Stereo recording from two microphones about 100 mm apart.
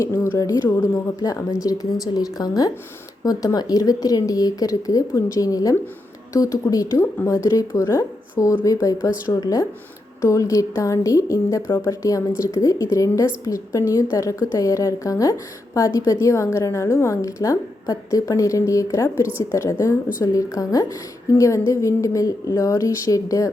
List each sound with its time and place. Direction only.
0.0 s a woman's voice: 30° left (ahead or behind)